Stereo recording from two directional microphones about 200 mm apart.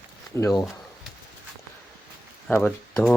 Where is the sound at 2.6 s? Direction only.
5° left (ahead or behind).